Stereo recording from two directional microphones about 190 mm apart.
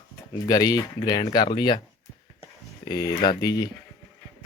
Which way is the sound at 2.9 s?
20° left (ahead or behind).